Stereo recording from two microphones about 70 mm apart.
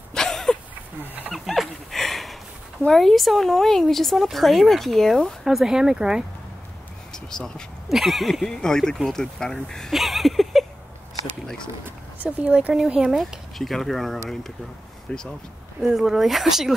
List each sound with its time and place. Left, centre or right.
0.1 s a sound: centre
2.9 s speech: centre
5.4 s speech: centre
7.2 s speech: centre
9.9 s a sound: centre
12.2 s speech: centre
13.1 s speech: centre
15.0 s speech: centre
15.8 s speech: centre